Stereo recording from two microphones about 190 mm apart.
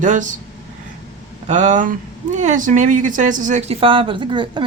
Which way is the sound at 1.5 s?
40° right (ahead or behind).